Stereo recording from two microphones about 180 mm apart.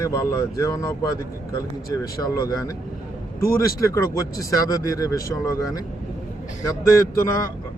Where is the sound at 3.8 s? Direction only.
20° left (ahead or behind).